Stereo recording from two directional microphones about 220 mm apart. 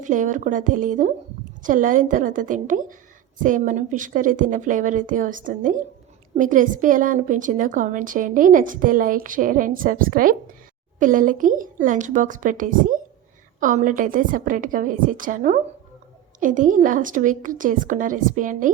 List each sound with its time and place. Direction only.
0.0 s a woman's voice: 35° right (ahead or behind)